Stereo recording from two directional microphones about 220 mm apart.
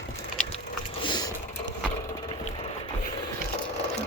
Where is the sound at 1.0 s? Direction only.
20° left (ahead or behind).